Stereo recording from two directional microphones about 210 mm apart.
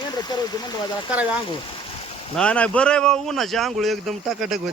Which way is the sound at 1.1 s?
5° right (ahead or behind).